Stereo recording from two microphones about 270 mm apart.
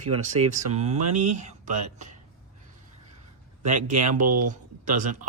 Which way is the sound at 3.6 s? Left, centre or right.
Right.